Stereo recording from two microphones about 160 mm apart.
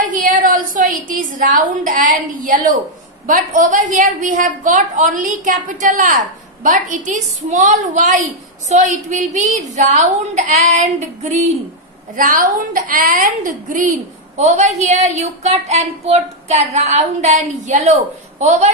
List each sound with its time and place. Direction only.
0.0 s a woman's voice: 55° right (ahead or behind)
12.2 s a woman's voice: 55° right (ahead or behind)
14.4 s a woman's voice: 45° right (ahead or behind)